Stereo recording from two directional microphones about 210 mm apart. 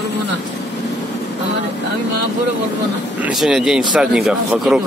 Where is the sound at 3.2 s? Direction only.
Centre (ahead or behind).